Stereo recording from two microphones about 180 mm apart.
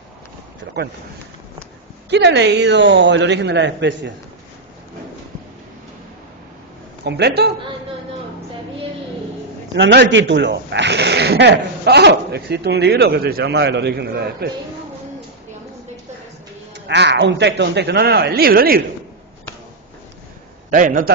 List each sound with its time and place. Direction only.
2.0 s speech: 70° right (ahead or behind)
7.1 s a man's voice: 65° right (ahead or behind)
9.8 s speech: 70° right (ahead or behind)
16.8 s speech: 70° right (ahead or behind)
20.7 s a man's voice: 50° right (ahead or behind)